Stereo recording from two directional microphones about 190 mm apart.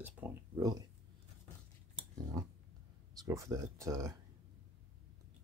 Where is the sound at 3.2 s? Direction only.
15° right (ahead or behind).